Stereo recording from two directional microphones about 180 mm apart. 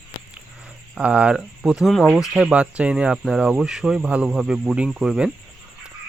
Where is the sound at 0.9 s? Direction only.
5° right (ahead or behind).